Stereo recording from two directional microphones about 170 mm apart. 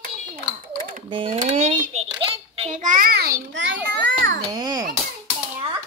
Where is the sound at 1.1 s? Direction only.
30° right (ahead or behind).